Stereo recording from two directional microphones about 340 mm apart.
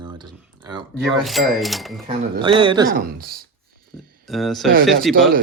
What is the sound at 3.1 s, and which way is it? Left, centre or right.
Speech, right.